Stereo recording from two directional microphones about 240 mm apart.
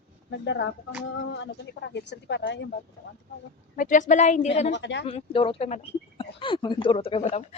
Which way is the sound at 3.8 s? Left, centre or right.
Left.